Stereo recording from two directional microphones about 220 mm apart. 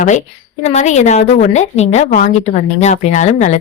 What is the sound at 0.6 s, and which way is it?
A woman's voice, 30° left (ahead or behind).